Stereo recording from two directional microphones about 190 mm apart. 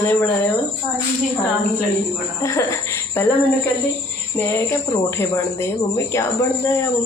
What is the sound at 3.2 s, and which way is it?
Speech, 15° left (ahead or behind).